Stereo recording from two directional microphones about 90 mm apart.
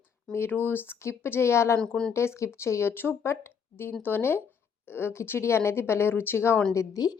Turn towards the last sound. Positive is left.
turn(degrees=40)  # may be behind; listen again after turning